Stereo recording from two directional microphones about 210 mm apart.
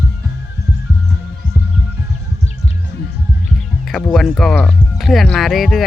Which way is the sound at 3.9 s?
Centre (ahead or behind).